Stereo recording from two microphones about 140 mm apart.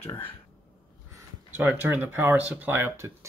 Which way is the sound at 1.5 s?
15° right (ahead or behind).